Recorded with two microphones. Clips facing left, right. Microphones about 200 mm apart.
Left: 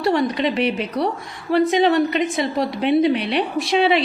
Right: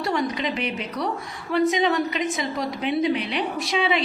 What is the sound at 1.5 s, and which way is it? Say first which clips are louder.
A woman's voice: left 5 dB; 65° left (ahead or behind).